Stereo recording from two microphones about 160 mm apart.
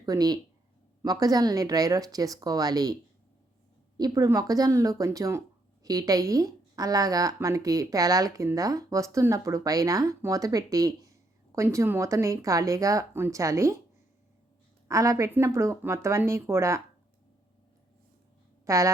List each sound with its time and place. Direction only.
0.0 s a woman's voice: 25° right (ahead or behind)
14.8 s speech: 20° right (ahead or behind)
18.6 s speech: 20° right (ahead or behind)